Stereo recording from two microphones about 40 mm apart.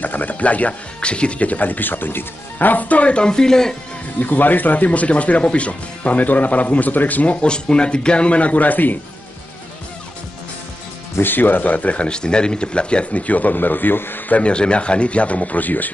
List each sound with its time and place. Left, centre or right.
0.0 s speech: left
3.2 s speech: centre
4.2 s speech: left
11.1 s speech: left
12.1 s speech: left
14.3 s speech: left